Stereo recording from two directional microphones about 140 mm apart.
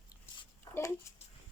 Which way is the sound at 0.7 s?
30° left (ahead or behind).